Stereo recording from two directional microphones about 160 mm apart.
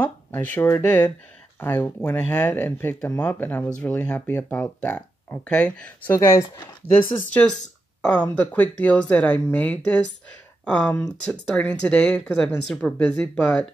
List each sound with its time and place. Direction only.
0.0 s speech: 10° left (ahead or behind)
7.1 s speech: 5° left (ahead or behind)